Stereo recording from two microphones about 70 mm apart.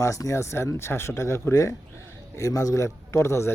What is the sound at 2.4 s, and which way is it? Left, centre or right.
A man's voice, left.